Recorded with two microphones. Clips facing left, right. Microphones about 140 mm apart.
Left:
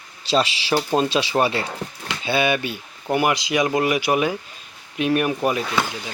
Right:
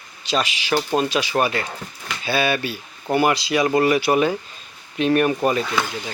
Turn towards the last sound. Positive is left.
turn(degrees=10)  # may be behind; listen again after turning